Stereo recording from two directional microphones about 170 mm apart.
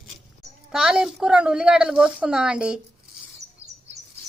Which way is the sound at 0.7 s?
5° right (ahead or behind).